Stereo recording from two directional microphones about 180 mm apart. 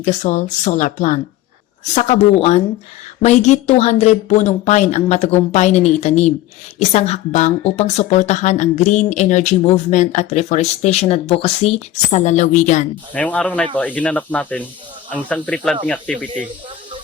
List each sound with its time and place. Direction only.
0.0 s speech: 45° left (ahead or behind)
13.1 s speech: 10° left (ahead or behind)